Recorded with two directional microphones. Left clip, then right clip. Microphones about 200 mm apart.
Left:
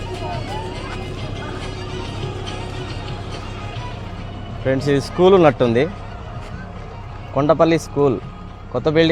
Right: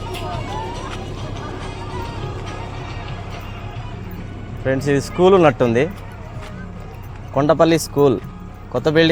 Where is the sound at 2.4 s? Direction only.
55° left (ahead or behind).